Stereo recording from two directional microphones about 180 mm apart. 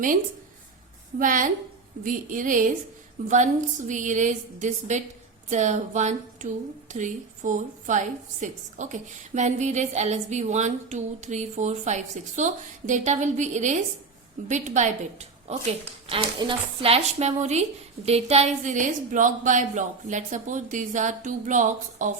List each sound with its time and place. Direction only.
1.2 s a woman's voice: 45° right (ahead or behind)